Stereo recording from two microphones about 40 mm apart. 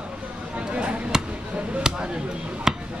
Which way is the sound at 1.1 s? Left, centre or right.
Centre.